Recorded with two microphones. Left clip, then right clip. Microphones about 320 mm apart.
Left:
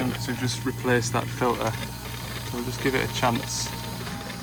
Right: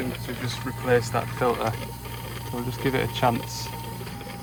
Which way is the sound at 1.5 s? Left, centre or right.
Right.